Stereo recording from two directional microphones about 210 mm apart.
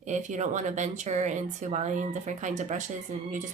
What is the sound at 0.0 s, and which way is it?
Speech, 35° right (ahead or behind).